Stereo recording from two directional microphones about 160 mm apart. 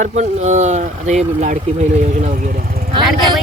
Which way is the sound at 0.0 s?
45° right (ahead or behind).